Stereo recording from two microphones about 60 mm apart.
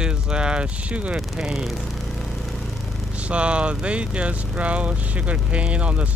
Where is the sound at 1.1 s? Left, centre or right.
Centre.